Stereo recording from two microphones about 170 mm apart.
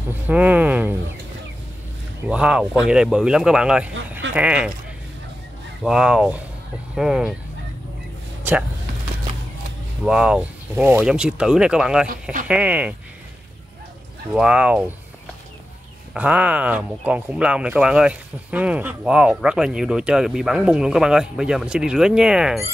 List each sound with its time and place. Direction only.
0.3 s speech: 10° right (ahead or behind)
2.2 s speech: 5° right (ahead or behind)
5.9 s speech: 5° right (ahead or behind)
8.5 s speech: 10° right (ahead or behind)
10.0 s speech: 5° right (ahead or behind)
12.1 s speech: 55° right (ahead or behind)
12.4 s speech: 10° right (ahead or behind)
14.3 s speech: 5° right (ahead or behind)
16.1 s speech: 10° right (ahead or behind)